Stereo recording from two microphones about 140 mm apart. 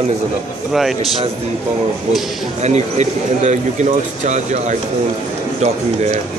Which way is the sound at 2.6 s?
55° right (ahead or behind).